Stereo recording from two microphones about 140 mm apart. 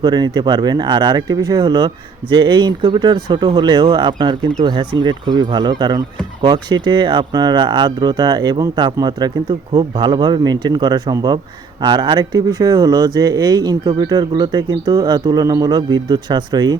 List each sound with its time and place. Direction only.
0.0 s speech: 30° right (ahead or behind)